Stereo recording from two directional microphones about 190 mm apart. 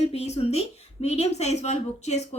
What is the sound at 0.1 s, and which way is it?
A woman's voice, 35° left (ahead or behind).